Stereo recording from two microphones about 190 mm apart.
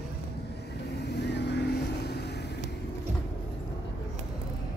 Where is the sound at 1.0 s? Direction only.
60° left (ahead or behind).